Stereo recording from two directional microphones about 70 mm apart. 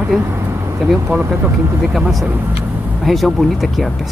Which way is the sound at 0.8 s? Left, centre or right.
Centre.